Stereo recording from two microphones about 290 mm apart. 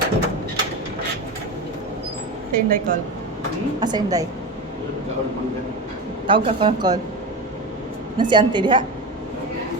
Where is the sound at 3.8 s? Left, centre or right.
Centre.